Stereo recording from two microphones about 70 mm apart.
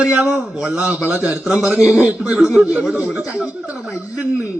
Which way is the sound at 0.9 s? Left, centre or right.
Right.